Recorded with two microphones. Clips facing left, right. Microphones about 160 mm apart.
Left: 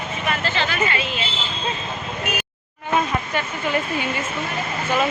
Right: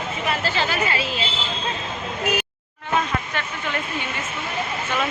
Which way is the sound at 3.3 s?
10° left (ahead or behind).